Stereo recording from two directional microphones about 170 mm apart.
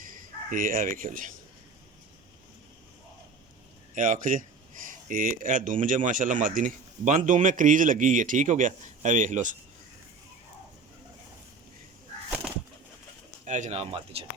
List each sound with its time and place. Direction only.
0.0 s speech: 50° right (ahead or behind)
3.9 s speech: 50° right (ahead or behind)
13.4 s speech: 45° right (ahead or behind)